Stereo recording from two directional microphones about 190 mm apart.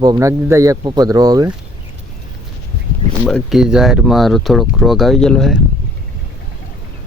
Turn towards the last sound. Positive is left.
turn(degrees=0)  # may be behind; listen again after turning